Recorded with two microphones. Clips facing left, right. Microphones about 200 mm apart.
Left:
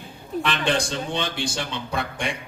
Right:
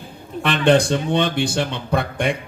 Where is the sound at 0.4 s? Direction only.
55° right (ahead or behind).